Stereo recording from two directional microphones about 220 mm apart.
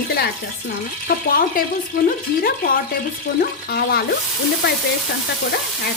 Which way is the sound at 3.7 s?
45° left (ahead or behind).